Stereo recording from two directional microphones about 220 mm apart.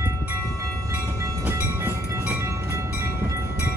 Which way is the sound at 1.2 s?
10° right (ahead or behind).